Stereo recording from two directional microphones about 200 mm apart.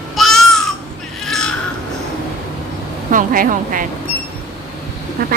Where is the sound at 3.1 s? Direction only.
45° right (ahead or behind).